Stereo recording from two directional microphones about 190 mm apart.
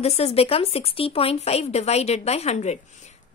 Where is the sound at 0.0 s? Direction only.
30° left (ahead or behind).